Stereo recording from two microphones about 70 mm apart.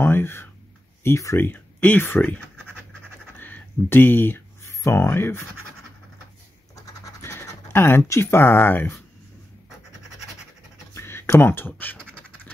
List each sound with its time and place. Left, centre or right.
0.0 s speech: left
1.5 s speech: left
3.3 s a sound: left
4.8 s speech: left
6.7 s scratch: left
11.0 s speech: left